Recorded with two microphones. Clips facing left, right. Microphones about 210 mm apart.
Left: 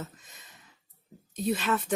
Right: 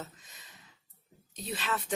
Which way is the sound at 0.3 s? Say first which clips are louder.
Left 2 dB; 50° left (ahead or behind).